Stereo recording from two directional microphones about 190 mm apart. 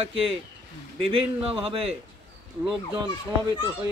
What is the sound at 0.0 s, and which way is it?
Speech, 30° right (ahead or behind).